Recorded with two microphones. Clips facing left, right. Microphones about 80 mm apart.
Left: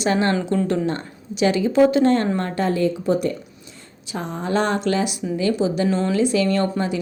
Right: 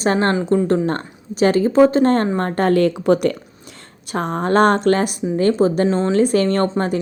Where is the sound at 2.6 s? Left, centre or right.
Right.